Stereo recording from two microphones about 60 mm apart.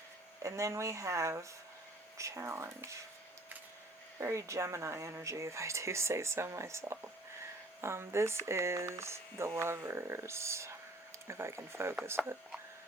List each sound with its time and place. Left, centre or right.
0.4 s speech: right
4.2 s speech: right